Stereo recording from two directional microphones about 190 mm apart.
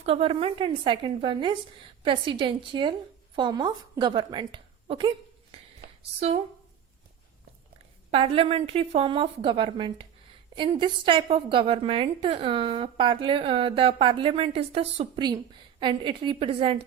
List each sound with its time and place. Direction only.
0.0 s a woman's voice: 30° right (ahead or behind)
8.1 s a woman's voice: 30° right (ahead or behind)